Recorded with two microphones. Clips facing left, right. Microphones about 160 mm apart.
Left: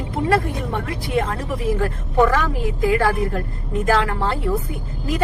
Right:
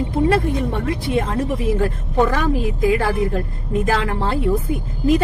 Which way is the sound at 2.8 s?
20° right (ahead or behind).